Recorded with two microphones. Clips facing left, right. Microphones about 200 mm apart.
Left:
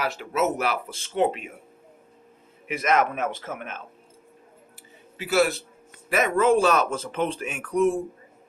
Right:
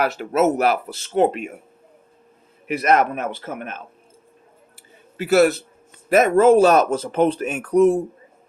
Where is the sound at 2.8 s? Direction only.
40° right (ahead or behind).